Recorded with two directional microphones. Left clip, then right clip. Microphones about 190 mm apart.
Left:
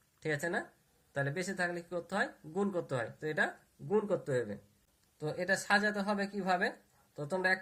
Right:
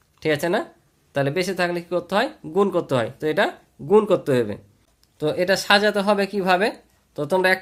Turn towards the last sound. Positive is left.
turn(degrees=-35)  # may be behind; listen again after turning